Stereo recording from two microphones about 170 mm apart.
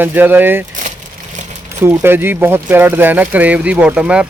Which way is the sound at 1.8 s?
15° right (ahead or behind).